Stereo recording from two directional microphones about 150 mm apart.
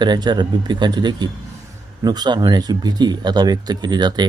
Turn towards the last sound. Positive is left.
turn(degrees=-30)  # may be behind; listen again after turning